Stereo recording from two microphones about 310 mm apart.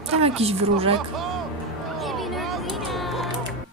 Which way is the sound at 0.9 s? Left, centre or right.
Centre.